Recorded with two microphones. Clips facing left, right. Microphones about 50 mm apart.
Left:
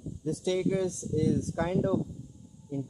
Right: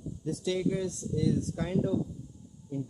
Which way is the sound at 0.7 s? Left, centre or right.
Left.